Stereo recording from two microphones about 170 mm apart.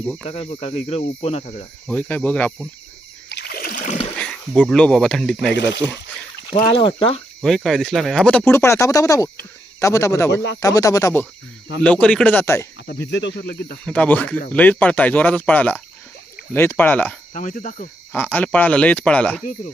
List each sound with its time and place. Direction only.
0.3 s speech: 35° left (ahead or behind)
1.9 s speech: 10° left (ahead or behind)
3.2 s a sound: 75° left (ahead or behind); by 3.9 s 55° left (ahead or behind)
4.2 s speech: 5° left (ahead or behind)
6.7 s speech: 30° left (ahead or behind)
7.4 s speech: centre (ahead or behind)
13.1 s speech: 90° left; by 13.7 s 70° left (ahead or behind)
13.8 s speech: 5° left (ahead or behind)
17.3 s speech: 50° left (ahead or behind)
18.1 s speech: 10° left (ahead or behind)